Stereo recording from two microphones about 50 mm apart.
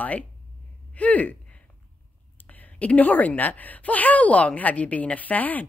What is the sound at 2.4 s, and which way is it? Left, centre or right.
A woman's voice, left.